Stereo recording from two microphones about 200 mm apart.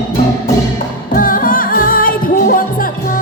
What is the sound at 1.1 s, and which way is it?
Music, 45° left (ahead or behind).